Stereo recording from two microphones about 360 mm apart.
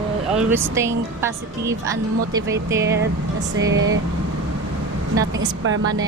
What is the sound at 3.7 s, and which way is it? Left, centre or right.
Speech, right.